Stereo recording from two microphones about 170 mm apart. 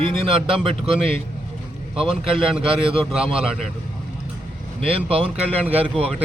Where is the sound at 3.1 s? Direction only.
5° right (ahead or behind).